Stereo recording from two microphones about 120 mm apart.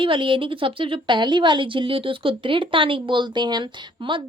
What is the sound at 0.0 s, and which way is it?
A woman's voice, 45° right (ahead or behind).